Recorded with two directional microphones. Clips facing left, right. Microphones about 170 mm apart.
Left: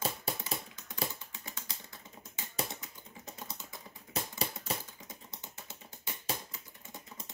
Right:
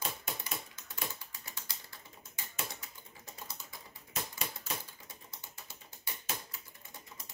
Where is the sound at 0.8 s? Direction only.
20° left (ahead or behind).